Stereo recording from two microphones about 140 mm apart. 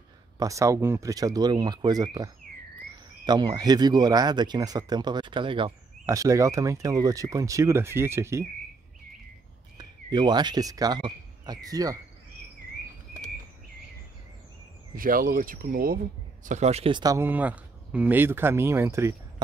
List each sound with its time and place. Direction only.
0.4 s speech: 20° right (ahead or behind)
6.0 s speech: 20° right (ahead or behind)
9.8 s speech: 30° right (ahead or behind)
15.0 s speech: 85° right
16.4 s speech: 55° right (ahead or behind)
16.9 s speech: 25° right (ahead or behind)
17.2 s speech: 10° right (ahead or behind)